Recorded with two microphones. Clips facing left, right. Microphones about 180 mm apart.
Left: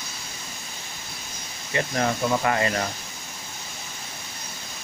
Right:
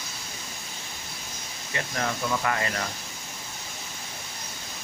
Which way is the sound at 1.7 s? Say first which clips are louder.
Left 6 dB; 30° left (ahead or behind).